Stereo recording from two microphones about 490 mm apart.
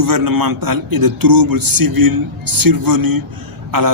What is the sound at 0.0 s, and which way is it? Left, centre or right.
A man's voice, right.